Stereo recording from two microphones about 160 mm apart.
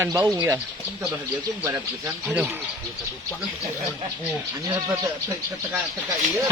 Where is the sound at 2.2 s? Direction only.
10° right (ahead or behind).